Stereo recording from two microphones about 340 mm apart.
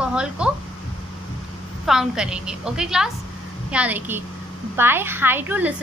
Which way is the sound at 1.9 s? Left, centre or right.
Centre.